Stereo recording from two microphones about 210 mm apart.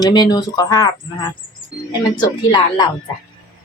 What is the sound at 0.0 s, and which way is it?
Speech, 20° left (ahead or behind).